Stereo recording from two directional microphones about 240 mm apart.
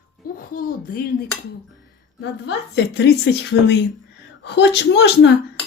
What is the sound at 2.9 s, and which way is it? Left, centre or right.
Speech, left.